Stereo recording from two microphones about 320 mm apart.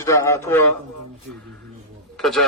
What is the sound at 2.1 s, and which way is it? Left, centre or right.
Speech, centre.